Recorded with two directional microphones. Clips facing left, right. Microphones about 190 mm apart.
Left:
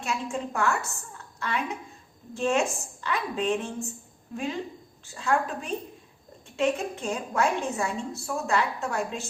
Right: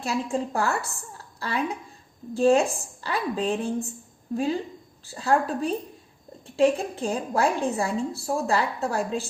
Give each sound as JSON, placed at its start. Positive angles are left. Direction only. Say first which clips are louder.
{"t": 0.0, "sound": "a woman's voice", "louder": "right 4 dB", "side_deg": -35}